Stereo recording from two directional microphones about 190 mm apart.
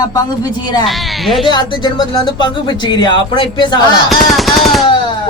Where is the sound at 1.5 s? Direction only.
25° left (ahead or behind).